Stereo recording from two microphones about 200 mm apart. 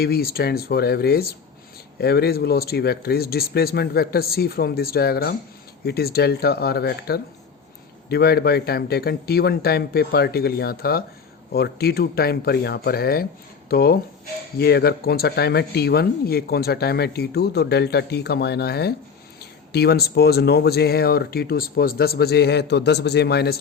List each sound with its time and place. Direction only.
0.0 s speech: 50° left (ahead or behind)